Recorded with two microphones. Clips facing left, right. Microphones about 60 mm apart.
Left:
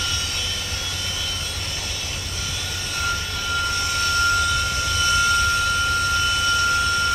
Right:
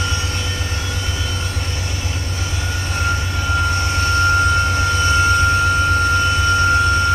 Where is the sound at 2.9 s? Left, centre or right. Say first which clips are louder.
Right 4 dB; right.